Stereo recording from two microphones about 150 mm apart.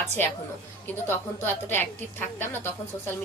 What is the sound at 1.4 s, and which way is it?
A woman's voice, 15° left (ahead or behind).